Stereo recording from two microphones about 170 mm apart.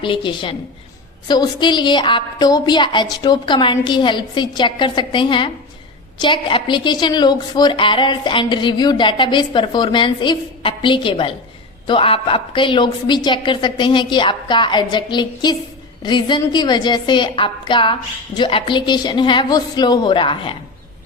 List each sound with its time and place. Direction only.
0.0 s a woman's voice: 30° left (ahead or behind)